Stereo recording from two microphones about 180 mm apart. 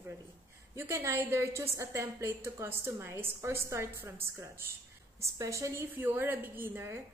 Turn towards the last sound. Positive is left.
turn(degrees=-10)  # may be behind; listen again after turning